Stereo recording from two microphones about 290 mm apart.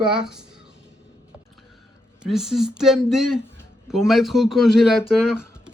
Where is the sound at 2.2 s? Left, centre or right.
Centre.